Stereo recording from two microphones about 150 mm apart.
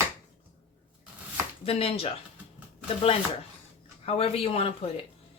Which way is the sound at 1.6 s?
40° left (ahead or behind).